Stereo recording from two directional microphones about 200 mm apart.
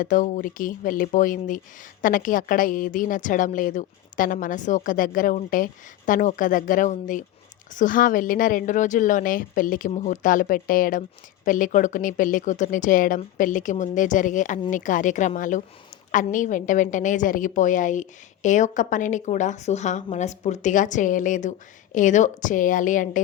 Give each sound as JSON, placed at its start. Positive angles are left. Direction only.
{"t": 0.0, "sound": "speech", "side_deg": 40}